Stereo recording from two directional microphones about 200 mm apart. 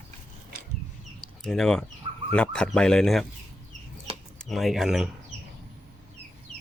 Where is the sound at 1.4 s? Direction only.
5° left (ahead or behind).